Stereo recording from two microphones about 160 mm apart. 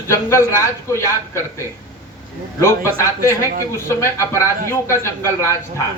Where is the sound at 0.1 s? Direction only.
15° left (ahead or behind).